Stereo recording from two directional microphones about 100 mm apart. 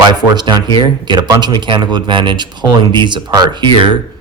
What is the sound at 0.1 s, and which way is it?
A man's voice, 45° right (ahead or behind).